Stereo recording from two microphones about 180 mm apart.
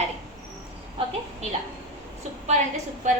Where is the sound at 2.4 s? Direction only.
40° right (ahead or behind).